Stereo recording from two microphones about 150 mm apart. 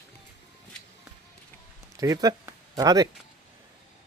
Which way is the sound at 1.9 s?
25° right (ahead or behind).